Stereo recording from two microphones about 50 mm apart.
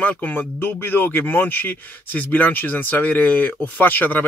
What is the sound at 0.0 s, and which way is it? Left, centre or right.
Speech, left.